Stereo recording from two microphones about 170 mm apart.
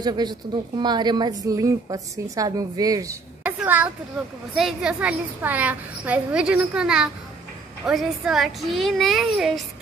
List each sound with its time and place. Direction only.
0.0 s a woman's voice: 25° right (ahead or behind)
3.4 s a child's voice: 10° right (ahead or behind)